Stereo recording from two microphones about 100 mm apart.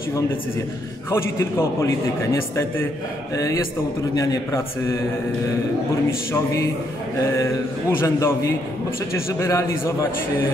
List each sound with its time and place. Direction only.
1.1 s a man's voice: 25° left (ahead or behind)
6.3 s a man's voice: 30° left (ahead or behind)
8.0 s a man's voice: 25° left (ahead or behind)